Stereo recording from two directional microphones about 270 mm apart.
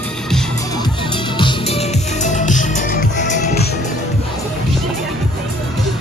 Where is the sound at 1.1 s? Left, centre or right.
Centre.